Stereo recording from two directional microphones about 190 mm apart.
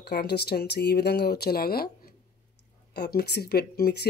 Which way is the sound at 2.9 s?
60° left (ahead or behind).